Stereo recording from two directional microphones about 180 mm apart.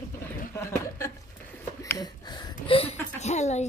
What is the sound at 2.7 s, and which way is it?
Speech, 30° left (ahead or behind).